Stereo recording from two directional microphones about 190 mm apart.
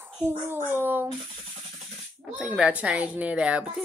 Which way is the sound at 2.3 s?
5° right (ahead or behind).